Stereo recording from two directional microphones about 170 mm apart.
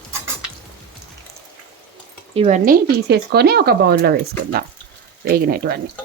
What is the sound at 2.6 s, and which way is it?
Speech, 65° right (ahead or behind).